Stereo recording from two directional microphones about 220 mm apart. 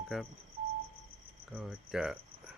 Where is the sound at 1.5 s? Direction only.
Centre (ahead or behind).